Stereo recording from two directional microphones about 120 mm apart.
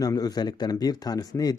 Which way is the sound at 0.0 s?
30° left (ahead or behind).